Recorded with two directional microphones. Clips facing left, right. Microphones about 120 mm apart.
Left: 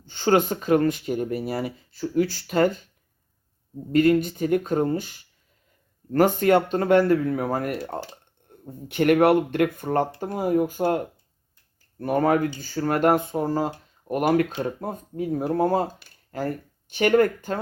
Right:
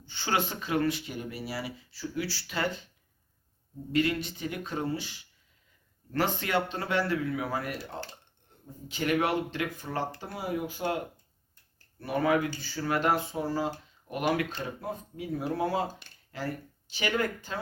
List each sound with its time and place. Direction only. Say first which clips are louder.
0.0 s speech: left 10 dB; 45° left (ahead or behind)
3.9 s speech: left 9 dB; 45° left (ahead or behind)
8.4 s a sound: left 11 dB; 50° left (ahead or behind)
8.9 s speech: left 10 dB; 60° left (ahead or behind)